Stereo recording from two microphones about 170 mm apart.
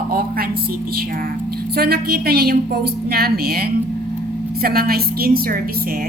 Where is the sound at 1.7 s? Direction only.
65° right (ahead or behind).